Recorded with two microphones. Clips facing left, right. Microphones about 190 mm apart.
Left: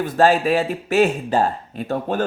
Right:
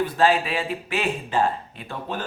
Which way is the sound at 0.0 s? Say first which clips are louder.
Left 4 dB; 45° left (ahead or behind).